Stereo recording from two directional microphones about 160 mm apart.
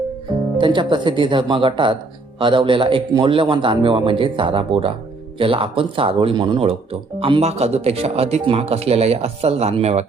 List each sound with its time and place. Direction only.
0.6 s speech: 30° right (ahead or behind)